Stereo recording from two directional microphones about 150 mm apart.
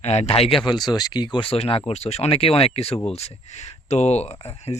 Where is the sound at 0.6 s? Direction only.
30° left (ahead or behind).